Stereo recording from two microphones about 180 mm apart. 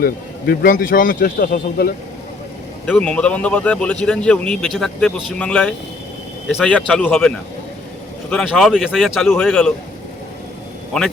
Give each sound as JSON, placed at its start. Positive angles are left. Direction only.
{"t": 0.0, "sound": "speech", "side_deg": 55}
{"t": 2.8, "sound": "a man's voice", "side_deg": 5}